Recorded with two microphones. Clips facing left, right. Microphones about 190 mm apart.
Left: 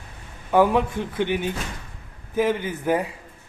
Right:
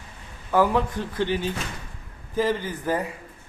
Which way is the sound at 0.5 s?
20° left (ahead or behind).